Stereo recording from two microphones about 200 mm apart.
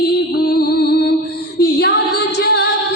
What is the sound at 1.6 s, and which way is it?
Female singing, 55° left (ahead or behind).